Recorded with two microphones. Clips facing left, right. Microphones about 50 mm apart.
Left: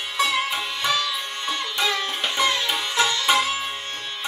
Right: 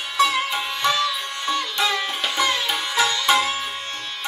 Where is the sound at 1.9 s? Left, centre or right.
Centre.